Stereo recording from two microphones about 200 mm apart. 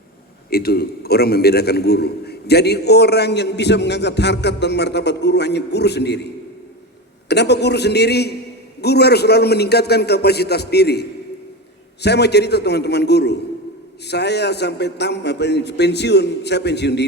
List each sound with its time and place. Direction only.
0.5 s a man's voice: 50° left (ahead or behind)
7.3 s a man's voice: 55° left (ahead or behind)
12.0 s a man's voice: 55° left (ahead or behind)